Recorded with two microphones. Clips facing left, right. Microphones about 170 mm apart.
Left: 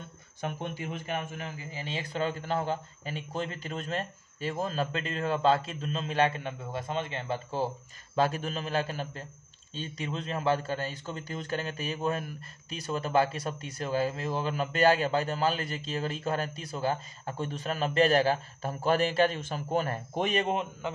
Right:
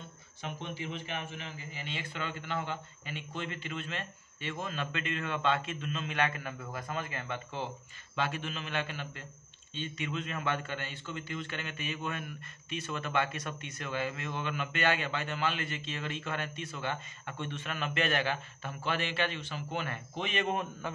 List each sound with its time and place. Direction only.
0.4 s a man's voice: 50° left (ahead or behind)